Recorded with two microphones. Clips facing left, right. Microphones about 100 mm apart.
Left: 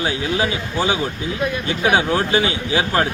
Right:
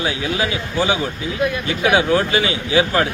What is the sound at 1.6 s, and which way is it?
Speech, 30° left (ahead or behind).